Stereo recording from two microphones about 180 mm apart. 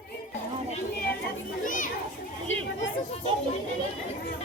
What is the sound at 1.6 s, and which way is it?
Children playing, 45° left (ahead or behind).